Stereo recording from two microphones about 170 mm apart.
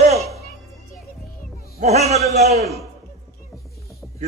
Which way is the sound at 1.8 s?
40° right (ahead or behind).